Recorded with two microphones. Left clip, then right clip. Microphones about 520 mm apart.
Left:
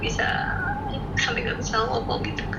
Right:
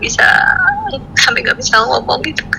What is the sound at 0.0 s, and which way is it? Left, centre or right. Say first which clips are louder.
Speech: right 16 dB; right.